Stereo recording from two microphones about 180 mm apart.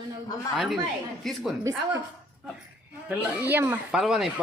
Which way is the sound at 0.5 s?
Centre (ahead or behind).